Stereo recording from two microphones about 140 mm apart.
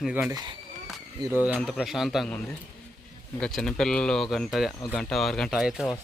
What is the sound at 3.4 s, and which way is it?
Speech, 5° left (ahead or behind).